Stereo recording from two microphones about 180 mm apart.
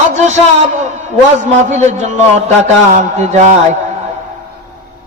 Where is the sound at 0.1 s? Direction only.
40° right (ahead or behind).